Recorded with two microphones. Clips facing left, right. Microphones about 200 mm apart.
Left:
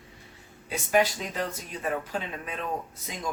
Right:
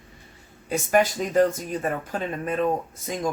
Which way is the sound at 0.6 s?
45° right (ahead or behind).